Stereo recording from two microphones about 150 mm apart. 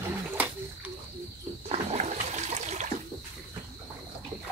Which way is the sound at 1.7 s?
45° right (ahead or behind).